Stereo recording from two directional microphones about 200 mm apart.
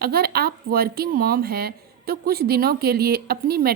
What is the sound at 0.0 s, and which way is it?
A woman's voice, 50° right (ahead or behind).